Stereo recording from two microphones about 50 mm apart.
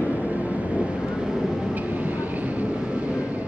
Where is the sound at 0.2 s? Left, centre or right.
Right.